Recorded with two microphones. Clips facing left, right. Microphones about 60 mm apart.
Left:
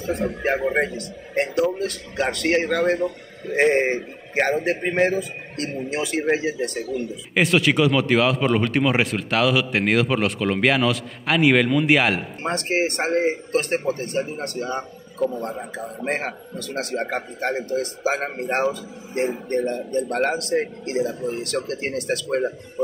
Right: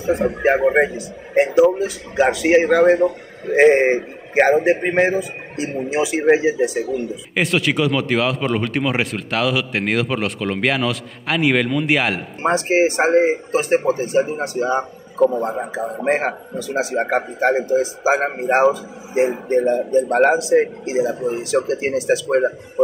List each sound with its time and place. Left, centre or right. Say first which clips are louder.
0.0 s a man's voice: right 6 dB; centre
7.3 s speech: left 1 dB; centre
12.4 s a man's voice: right 7 dB; centre